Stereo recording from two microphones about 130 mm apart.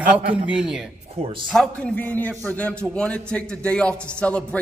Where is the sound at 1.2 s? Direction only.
50° right (ahead or behind).